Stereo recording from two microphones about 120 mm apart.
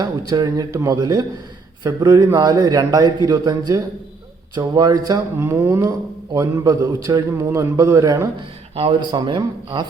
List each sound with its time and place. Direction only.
0.0 s a man's voice: 35° right (ahead or behind)
5.4 s a man's voice: 20° right (ahead or behind)
8.7 s a man's voice: 55° right (ahead or behind)
9.0 s a man's voice: 40° right (ahead or behind)